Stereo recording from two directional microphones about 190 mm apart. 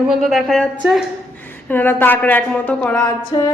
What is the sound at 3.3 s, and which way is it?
Music, 25° left (ahead or behind).